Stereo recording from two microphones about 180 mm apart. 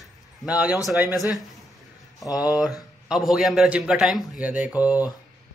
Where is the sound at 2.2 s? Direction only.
20° left (ahead or behind).